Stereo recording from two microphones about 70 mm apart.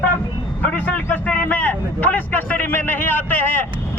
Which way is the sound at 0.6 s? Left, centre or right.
Left.